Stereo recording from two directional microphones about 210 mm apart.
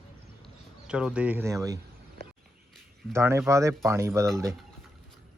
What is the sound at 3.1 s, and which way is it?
Speech, 10° right (ahead or behind).